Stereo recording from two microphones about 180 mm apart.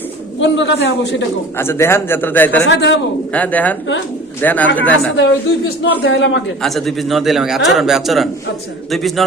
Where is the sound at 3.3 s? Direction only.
10° left (ahead or behind).